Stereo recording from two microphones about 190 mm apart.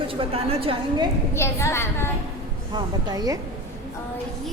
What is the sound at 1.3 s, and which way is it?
Child singing, 15° left (ahead or behind).